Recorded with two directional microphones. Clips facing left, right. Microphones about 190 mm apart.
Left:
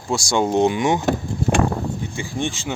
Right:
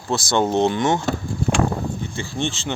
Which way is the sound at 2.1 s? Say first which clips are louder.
Even; 10° left (ahead or behind).